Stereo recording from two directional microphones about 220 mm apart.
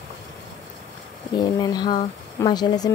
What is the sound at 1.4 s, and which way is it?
Speech, 20° left (ahead or behind).